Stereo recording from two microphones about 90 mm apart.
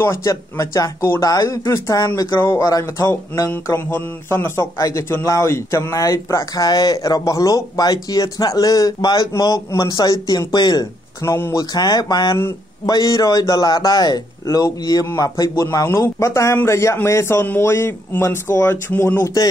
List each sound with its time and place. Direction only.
0.0 s a man's voice: 30° left (ahead or behind); by 10.9 s 55° left (ahead or behind)
11.2 s speech: 30° left (ahead or behind)
11.7 s a man's voice: 50° left (ahead or behind); by 19.3 s 25° left (ahead or behind)